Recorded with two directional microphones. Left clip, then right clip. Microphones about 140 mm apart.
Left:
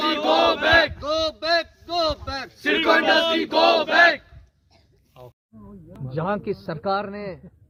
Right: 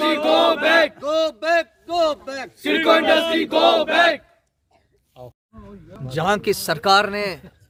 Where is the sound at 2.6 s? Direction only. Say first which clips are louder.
Right 2 dB; 50° right (ahead or behind).